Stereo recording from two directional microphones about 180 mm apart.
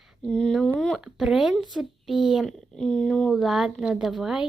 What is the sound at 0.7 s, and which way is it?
Speech, centre (ahead or behind).